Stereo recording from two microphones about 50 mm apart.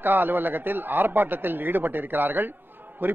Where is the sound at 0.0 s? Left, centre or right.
Right.